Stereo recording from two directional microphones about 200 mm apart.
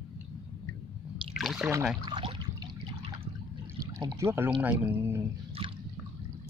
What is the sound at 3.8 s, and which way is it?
Speech, 15° right (ahead or behind).